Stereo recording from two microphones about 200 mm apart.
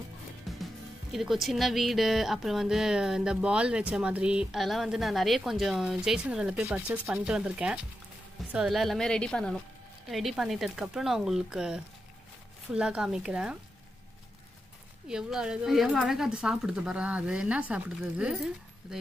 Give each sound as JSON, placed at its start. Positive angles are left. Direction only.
{"t": 0.5, "sound": "music", "side_deg": 0}
{"t": 1.1, "sound": "a woman's voice", "side_deg": 0}
{"t": 15.0, "sound": "a woman's voice", "side_deg": -5}